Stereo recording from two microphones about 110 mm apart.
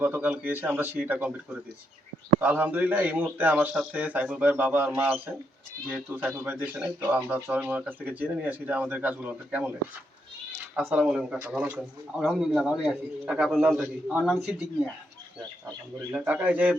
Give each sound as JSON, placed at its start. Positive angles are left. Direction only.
{"t": 0.0, "sound": "speech", "side_deg": -15}
{"t": 2.4, "sound": "speech", "side_deg": -15}
{"t": 16.1, "sound": "speech", "side_deg": -10}